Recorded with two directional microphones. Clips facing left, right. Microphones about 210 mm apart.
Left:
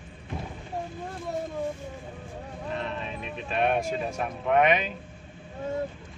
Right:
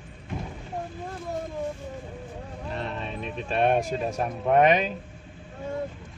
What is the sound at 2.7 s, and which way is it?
Speech, 35° right (ahead or behind).